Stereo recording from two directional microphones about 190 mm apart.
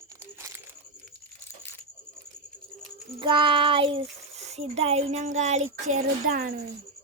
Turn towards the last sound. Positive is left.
turn(degrees=-45)  # may be behind; listen again after turning